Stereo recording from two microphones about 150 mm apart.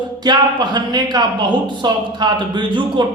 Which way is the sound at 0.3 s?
30° right (ahead or behind).